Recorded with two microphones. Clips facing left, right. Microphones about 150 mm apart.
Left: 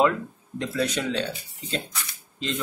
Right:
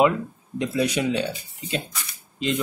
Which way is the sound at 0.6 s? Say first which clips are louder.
Right 3 dB; 15° right (ahead or behind).